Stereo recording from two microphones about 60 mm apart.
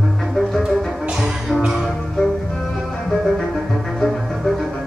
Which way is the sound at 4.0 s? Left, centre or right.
Centre.